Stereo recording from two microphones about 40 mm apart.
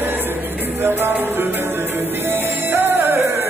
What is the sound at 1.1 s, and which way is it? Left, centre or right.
Music, right.